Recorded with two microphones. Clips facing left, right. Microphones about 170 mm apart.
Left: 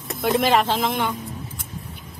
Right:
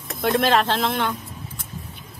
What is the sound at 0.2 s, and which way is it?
Speech, 10° left (ahead or behind).